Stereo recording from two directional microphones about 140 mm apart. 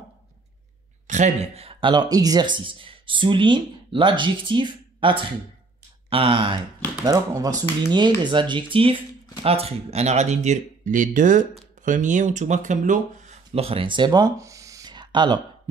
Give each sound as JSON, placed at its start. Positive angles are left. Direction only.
{"t": 1.0, "sound": "speech", "side_deg": -60}
{"t": 7.1, "sound": "speech", "side_deg": -25}
{"t": 13.5, "sound": "speech", "side_deg": -45}